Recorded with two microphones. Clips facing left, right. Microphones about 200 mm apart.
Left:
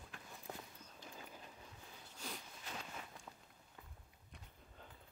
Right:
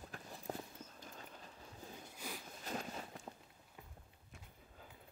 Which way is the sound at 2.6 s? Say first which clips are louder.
Right 9 dB; 40° right (ahead or behind).